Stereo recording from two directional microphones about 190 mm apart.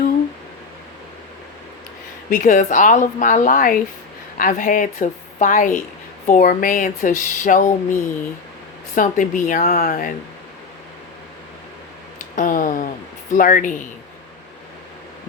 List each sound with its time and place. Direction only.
2.3 s speech: 40° left (ahead or behind)
9.0 s speech: 45° left (ahead or behind)
12.4 s a sound: 45° left (ahead or behind)
13.3 s speech: 45° left (ahead or behind)